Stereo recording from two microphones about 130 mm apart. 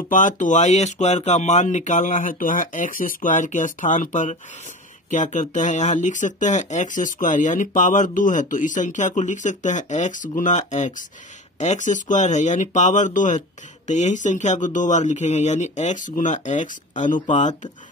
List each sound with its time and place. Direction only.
0.1 s speech: 80° left
10.7 s speech: 65° left (ahead or behind)